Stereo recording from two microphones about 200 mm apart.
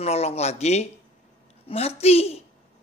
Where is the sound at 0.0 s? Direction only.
30° left (ahead or behind).